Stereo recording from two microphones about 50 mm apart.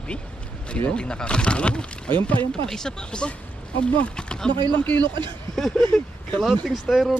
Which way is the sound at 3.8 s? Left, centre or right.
Left.